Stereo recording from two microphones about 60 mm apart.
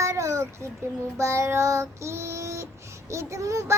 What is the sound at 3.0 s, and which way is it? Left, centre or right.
Speech, right.